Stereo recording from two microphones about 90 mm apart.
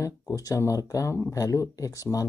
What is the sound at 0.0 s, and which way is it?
Speech, 40° left (ahead or behind).